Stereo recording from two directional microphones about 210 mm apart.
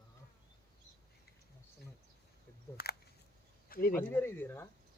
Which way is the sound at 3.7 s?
45° left (ahead or behind).